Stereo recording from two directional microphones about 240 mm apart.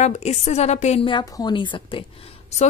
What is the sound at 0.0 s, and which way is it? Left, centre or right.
A woman's voice, left.